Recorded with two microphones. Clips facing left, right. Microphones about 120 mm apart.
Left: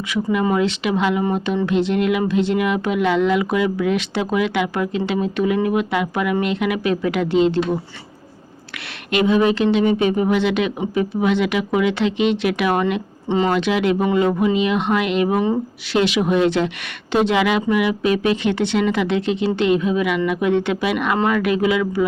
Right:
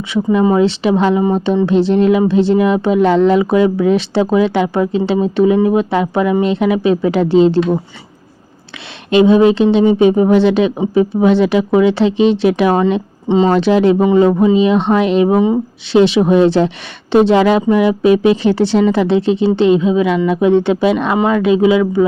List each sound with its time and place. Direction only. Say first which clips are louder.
0.1 s speech: right 7 dB; 25° right (ahead or behind)
9.0 s speech: right 8 dB; 30° right (ahead or behind)
13.5 s speech: right 8 dB; 35° right (ahead or behind)